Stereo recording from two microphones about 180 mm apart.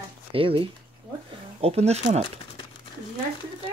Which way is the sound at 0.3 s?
30° right (ahead or behind).